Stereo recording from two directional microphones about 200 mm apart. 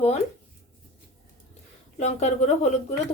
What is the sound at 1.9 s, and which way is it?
Speech, 35° left (ahead or behind).